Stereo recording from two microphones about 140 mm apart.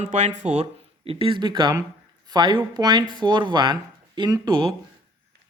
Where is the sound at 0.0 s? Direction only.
55° right (ahead or behind); by 4.7 s 35° right (ahead or behind).